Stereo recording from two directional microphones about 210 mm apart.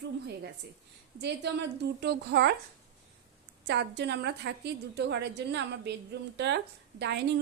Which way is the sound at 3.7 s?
55° right (ahead or behind).